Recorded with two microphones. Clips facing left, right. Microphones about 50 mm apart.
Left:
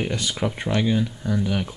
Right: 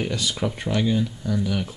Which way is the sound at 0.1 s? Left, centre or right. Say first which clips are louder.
Even; left.